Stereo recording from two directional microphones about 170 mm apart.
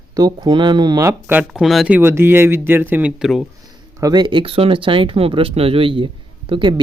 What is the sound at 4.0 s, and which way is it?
Speech, 25° right (ahead or behind).